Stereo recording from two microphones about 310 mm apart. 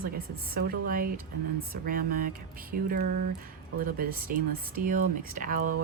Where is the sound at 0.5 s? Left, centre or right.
Right.